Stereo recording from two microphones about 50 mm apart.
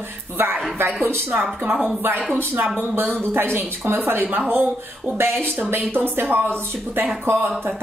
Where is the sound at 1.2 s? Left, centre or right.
Right.